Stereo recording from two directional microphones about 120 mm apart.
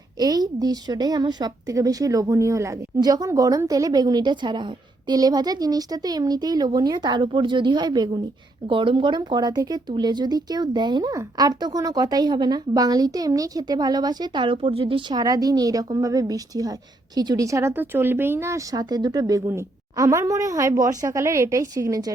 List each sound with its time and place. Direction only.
0.2 s a woman's voice: 35° right (ahead or behind); by 15.0 s 50° right (ahead or behind)
15.1 s a woman's voice: 30° right (ahead or behind)
19.5 s a woman's voice: 25° right (ahead or behind)